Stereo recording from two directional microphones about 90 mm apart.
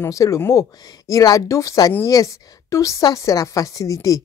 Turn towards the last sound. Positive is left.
turn(degrees=40)  # may be behind; listen again after turning